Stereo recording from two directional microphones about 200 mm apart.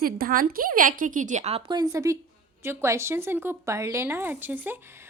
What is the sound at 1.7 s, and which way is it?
A woman's voice, 20° right (ahead or behind).